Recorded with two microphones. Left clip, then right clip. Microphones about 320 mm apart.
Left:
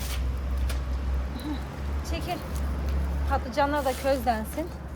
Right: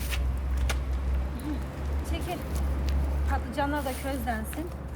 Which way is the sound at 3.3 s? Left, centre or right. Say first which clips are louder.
Left 5 dB; centre.